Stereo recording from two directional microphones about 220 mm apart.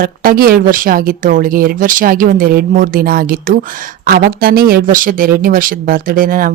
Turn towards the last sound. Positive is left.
turn(degrees=-40)  # may be behind; listen again after turning